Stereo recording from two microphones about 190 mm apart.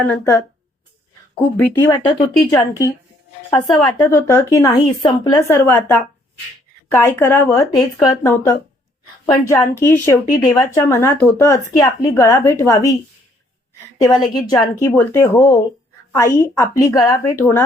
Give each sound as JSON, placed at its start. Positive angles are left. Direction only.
{"t": 0.0, "sound": "speech", "side_deg": 10}
{"t": 3.7, "sound": "speech", "side_deg": 5}
{"t": 10.2, "sound": "speech", "side_deg": 40}
{"t": 10.8, "sound": "speech", "side_deg": 15}
{"t": 14.3, "sound": "speech", "side_deg": 20}